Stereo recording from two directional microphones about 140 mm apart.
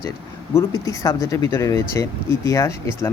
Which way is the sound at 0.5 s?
25° left (ahead or behind).